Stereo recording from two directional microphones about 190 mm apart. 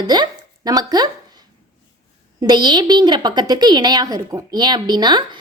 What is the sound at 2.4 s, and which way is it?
A woman's voice, 20° right (ahead or behind).